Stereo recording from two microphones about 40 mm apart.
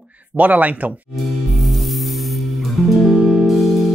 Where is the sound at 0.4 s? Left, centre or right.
Right.